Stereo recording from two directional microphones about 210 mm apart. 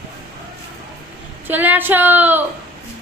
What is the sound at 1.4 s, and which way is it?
Speech, 10° right (ahead or behind).